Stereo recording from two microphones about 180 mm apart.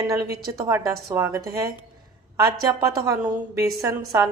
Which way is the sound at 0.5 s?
15° right (ahead or behind).